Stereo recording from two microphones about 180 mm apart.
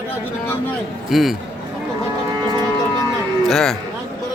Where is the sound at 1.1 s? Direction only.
Centre (ahead or behind).